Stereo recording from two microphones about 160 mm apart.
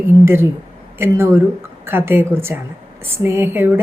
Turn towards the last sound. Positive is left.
turn(degrees=-15)  # may be behind; listen again after turning